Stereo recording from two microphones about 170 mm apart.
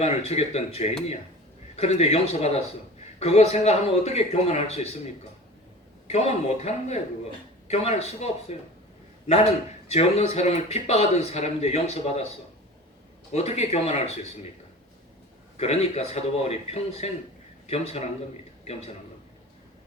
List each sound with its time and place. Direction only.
0.0 s a man's voice: 40° left (ahead or behind)
6.1 s a man's voice: 40° left (ahead or behind)
9.9 s a man's voice: 40° left (ahead or behind)
13.3 s a man's voice: 40° left (ahead or behind)
15.5 s a man's voice: 40° left (ahead or behind)